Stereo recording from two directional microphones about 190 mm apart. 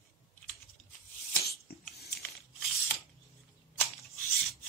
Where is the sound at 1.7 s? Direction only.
55° left (ahead or behind).